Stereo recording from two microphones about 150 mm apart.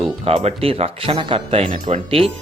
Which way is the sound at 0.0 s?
45° right (ahead or behind).